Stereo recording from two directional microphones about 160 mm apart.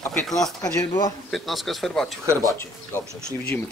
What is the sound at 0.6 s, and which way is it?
Speech, 20° left (ahead or behind).